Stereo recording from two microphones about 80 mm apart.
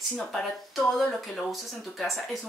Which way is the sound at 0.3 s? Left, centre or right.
Centre.